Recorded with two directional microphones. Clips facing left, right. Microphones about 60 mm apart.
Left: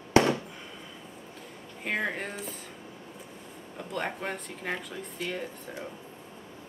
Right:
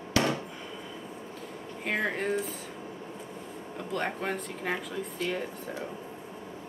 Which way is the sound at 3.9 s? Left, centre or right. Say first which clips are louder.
Right 2 dB; centre.